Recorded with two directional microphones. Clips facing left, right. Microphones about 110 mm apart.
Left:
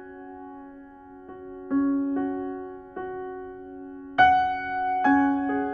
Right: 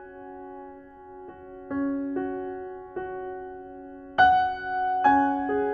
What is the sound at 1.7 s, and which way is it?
Music, 20° left (ahead or behind).